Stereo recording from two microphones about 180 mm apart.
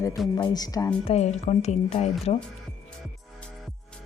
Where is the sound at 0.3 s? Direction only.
20° left (ahead or behind).